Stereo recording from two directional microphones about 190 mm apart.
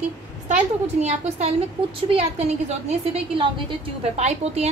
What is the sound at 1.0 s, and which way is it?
A woman's voice, 35° right (ahead or behind).